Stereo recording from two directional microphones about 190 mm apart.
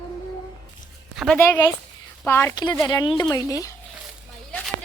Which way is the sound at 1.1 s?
Centre (ahead or behind).